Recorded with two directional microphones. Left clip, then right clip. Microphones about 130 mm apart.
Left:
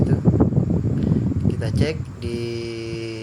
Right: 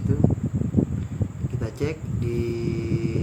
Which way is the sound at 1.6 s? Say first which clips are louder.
Left 4 dB; 15° left (ahead or behind).